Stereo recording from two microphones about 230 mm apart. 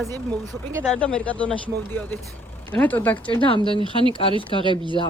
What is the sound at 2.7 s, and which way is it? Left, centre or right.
Speech, centre.